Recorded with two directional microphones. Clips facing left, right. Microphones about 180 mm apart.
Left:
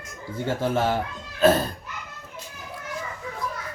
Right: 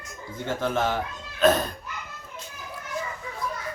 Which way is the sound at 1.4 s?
5° left (ahead or behind).